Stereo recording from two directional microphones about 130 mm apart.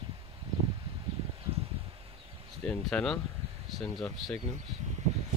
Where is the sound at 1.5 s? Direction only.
50° right (ahead or behind).